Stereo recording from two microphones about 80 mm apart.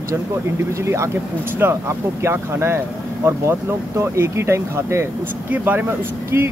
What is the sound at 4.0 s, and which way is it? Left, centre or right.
Speech, right.